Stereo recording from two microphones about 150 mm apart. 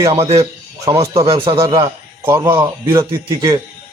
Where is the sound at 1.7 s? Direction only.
20° right (ahead or behind).